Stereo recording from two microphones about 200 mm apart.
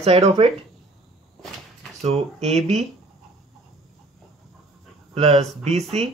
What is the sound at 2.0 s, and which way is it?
Speech, 30° right (ahead or behind).